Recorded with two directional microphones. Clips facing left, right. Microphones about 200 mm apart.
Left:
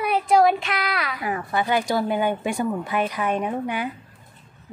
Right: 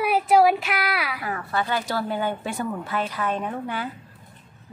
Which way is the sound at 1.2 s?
15° left (ahead or behind).